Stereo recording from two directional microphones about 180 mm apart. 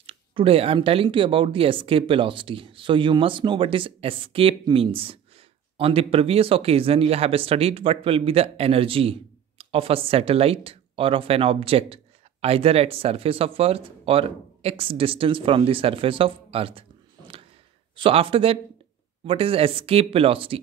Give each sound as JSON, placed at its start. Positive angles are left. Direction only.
{"t": 0.0, "sound": "speech", "side_deg": -30}
{"t": 17.9, "sound": "speech", "side_deg": -30}